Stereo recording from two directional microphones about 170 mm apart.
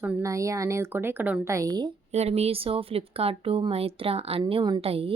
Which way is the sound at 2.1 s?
40° right (ahead or behind).